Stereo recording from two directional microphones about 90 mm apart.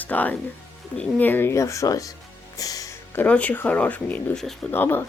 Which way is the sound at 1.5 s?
35° left (ahead or behind).